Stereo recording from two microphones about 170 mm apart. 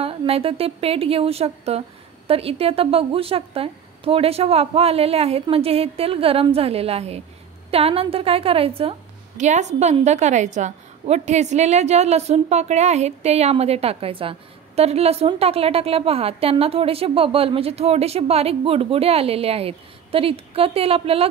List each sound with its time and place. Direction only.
0.0 s speech: 35° right (ahead or behind)